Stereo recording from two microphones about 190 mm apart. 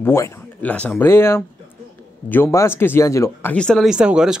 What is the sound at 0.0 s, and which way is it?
Speech, 15° left (ahead or behind).